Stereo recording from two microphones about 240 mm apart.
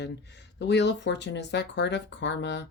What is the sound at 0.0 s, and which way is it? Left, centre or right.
Speech, left.